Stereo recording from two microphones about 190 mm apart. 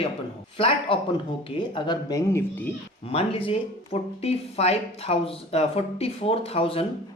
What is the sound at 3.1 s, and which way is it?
A woman's voice, 30° left (ahead or behind).